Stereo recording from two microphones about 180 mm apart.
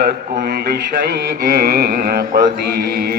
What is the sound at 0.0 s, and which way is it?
A man's voice, 55° right (ahead or behind).